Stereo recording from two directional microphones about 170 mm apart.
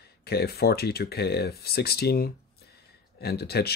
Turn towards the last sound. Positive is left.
turn(degrees=70)  # may be behind; listen again after turning